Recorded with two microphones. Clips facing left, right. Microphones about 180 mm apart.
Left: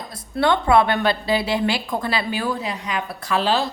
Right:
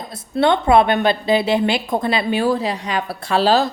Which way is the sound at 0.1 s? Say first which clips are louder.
Right 3 dB; 25° right (ahead or behind).